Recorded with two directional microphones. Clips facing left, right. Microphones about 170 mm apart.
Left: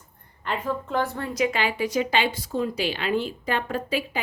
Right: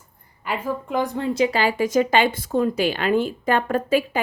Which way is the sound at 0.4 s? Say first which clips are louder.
Right 2 dB; 10° right (ahead or behind).